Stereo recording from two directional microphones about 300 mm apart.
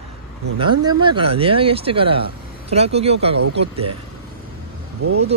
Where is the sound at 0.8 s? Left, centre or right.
Centre.